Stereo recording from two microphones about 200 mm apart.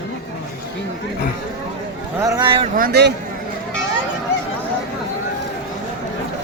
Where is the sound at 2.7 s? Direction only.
50° right (ahead or behind).